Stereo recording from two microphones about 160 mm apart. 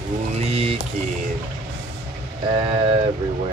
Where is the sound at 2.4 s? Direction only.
35° right (ahead or behind).